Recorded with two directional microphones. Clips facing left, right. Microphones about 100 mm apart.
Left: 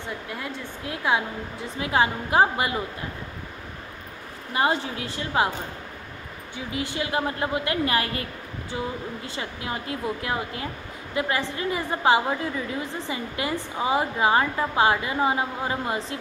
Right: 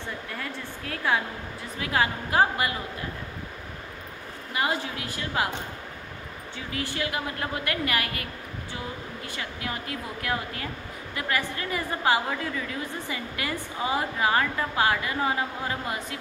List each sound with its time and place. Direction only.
0.3 s a woman's voice: 20° left (ahead or behind)
4.6 s a woman's voice: 30° left (ahead or behind)
6.5 s a woman's voice: 20° left (ahead or behind)